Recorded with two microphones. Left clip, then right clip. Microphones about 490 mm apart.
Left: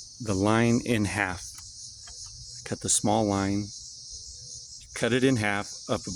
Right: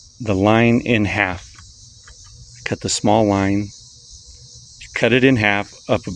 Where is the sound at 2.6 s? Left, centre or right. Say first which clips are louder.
Right 9 dB; left.